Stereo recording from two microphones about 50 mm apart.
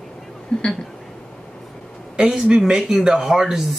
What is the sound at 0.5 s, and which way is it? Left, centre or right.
Speech, centre.